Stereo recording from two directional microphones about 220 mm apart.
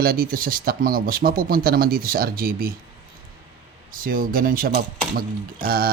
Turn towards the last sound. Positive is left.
turn(degrees=-40)  # may be behind; listen again after turning